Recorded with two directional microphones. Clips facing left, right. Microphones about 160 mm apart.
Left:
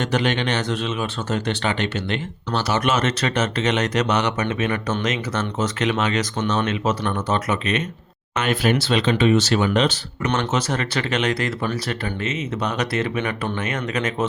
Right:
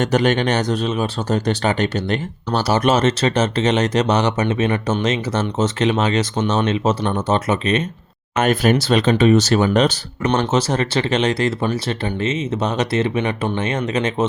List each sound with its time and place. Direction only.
0.0 s speech: 45° right (ahead or behind)
8.4 s speech: 45° right (ahead or behind); by 14.3 s 25° right (ahead or behind)